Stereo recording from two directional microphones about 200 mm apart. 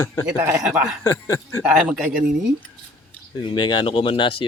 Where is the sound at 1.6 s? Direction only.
5° right (ahead or behind).